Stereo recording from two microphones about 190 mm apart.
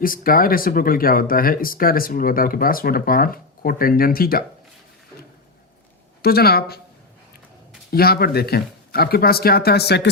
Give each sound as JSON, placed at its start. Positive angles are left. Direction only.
{"t": 0.0, "sound": "speech", "side_deg": 50}
{"t": 6.2, "sound": "speech", "side_deg": 55}
{"t": 7.9, "sound": "speech", "side_deg": 55}